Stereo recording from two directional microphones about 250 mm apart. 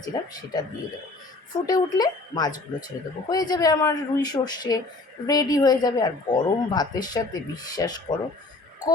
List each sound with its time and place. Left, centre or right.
0.0 s speech: centre
1.6 s speech: centre